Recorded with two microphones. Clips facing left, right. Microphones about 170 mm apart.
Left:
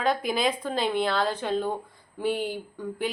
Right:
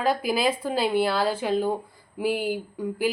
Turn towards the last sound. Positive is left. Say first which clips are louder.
# right 4 dB
turn(degrees=-5)  # may be behind; listen again after turning